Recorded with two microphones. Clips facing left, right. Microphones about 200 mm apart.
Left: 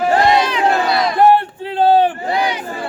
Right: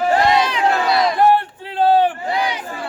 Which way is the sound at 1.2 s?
25° left (ahead or behind).